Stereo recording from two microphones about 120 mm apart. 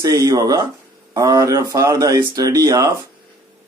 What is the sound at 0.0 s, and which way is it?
Speech, 30° right (ahead or behind).